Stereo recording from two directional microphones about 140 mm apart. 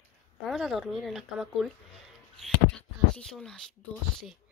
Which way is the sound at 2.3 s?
5° left (ahead or behind).